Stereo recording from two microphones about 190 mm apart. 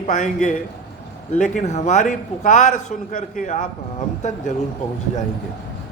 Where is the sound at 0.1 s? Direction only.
40° left (ahead or behind).